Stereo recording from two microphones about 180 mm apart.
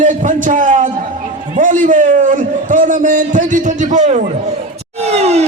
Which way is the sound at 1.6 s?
45° right (ahead or behind).